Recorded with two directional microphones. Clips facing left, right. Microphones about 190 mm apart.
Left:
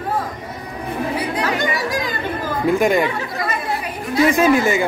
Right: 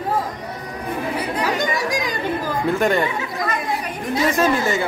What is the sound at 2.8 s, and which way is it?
Speech, 10° left (ahead or behind).